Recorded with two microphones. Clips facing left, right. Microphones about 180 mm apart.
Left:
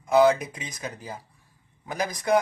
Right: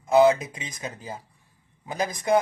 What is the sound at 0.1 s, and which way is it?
Speech, 25° right (ahead or behind).